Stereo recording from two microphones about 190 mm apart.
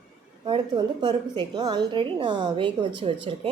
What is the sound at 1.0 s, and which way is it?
A woman's voice, 20° right (ahead or behind).